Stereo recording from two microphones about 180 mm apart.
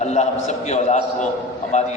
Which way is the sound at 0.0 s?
40° left (ahead or behind).